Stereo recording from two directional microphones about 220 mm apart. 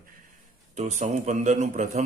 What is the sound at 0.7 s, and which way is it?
Speech, 30° right (ahead or behind).